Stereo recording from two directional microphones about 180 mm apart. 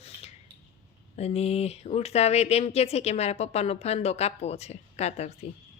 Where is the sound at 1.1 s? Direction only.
35° left (ahead or behind).